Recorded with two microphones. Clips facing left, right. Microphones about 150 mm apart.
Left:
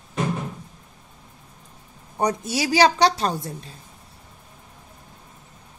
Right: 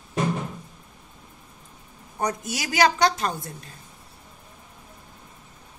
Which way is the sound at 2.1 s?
30° left (ahead or behind).